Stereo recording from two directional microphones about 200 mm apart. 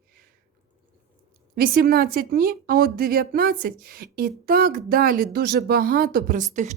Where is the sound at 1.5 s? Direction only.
50° right (ahead or behind).